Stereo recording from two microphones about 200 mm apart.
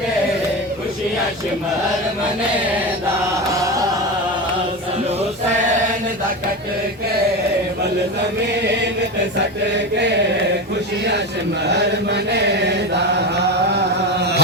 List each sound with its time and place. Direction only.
11.7 s chant: 55° right (ahead or behind)